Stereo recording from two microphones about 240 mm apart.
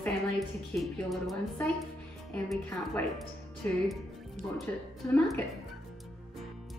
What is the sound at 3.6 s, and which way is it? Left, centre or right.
Speech, centre.